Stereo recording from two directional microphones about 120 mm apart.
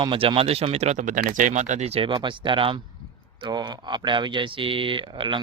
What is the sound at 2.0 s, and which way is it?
Speech, 40° right (ahead or behind).